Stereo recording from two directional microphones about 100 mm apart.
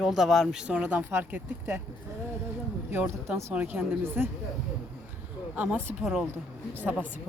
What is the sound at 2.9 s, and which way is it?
A woman's voice, 25° right (ahead or behind).